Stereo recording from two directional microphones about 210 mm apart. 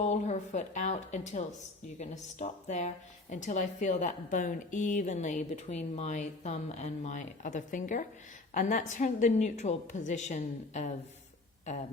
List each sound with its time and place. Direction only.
0.0 s speech: 35° left (ahead or behind)